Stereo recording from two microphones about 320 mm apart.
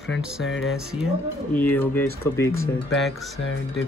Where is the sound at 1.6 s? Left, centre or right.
Centre.